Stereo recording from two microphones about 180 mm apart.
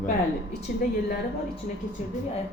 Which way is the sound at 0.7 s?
55° left (ahead or behind).